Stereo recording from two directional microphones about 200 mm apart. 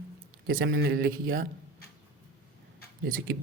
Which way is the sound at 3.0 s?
45° right (ahead or behind).